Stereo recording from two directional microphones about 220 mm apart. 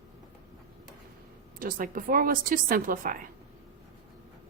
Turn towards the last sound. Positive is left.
turn(degrees=-40)  # may be behind; listen again after turning